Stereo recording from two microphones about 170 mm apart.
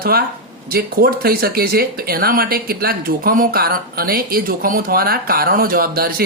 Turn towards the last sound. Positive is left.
turn(degrees=-60)  # may be behind; listen again after turning